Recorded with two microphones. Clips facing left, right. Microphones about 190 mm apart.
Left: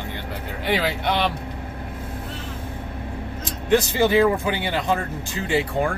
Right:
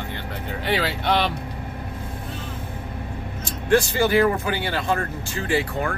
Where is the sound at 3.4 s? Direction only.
20° left (ahead or behind).